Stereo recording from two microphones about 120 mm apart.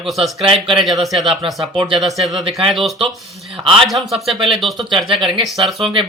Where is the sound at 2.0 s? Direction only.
Centre (ahead or behind).